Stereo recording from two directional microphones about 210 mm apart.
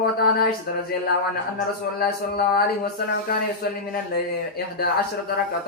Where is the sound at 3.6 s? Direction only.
45° left (ahead or behind).